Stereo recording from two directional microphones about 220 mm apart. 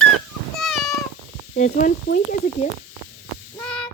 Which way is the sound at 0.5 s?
Centre (ahead or behind).